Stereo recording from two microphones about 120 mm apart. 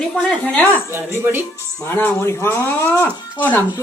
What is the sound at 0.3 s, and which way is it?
Speech, 10° left (ahead or behind).